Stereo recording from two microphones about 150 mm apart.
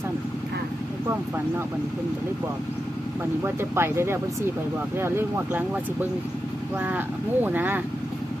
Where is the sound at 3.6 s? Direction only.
15° right (ahead or behind).